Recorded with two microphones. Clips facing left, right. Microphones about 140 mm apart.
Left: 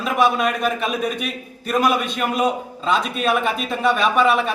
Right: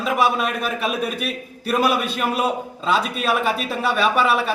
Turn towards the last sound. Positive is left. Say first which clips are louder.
# left 1 dB
turn(degrees=0)  # may be behind; listen again after turning